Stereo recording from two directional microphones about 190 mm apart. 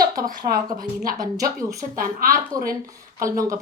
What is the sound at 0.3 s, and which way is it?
Speech, 20° right (ahead or behind).